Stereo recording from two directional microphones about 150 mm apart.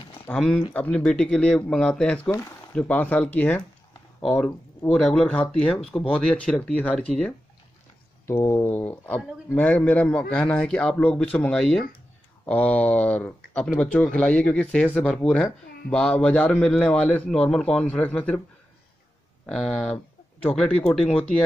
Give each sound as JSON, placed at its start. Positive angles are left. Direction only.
{"t": 0.0, "sound": "a sound", "side_deg": 40}
{"t": 0.3, "sound": "speech", "side_deg": 10}
{"t": 19.4, "sound": "speech", "side_deg": 5}